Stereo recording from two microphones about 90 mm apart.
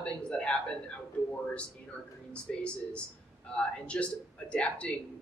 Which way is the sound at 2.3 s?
15° left (ahead or behind).